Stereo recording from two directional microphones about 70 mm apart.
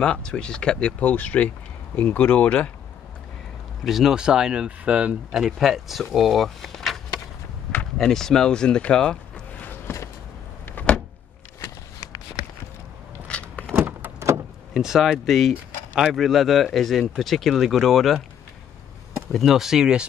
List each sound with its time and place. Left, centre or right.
0.0 s speech: centre
3.8 s speech: centre
5.3 s speech: centre
8.0 s speech: centre
9.9 s a sound: left
10.6 s power windows: left
11.6 s a sound: left
13.3 s power windows: centre
13.7 s door: right
14.7 s speech: centre
19.3 s speech: centre